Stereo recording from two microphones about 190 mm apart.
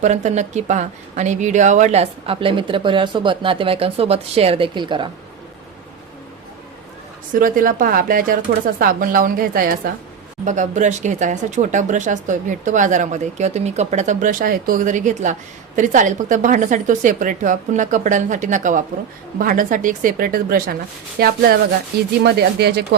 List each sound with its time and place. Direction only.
0.0 s speech: 40° right (ahead or behind)
7.3 s speech: 45° right (ahead or behind)